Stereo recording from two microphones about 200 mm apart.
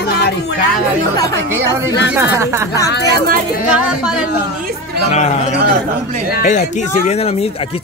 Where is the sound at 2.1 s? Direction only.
15° right (ahead or behind).